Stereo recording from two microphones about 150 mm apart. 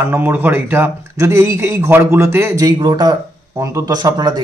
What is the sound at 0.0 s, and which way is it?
A man's voice, 15° right (ahead or behind).